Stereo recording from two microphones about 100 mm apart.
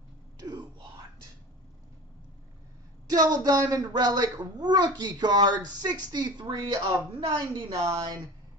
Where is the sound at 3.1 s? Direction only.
40° right (ahead or behind).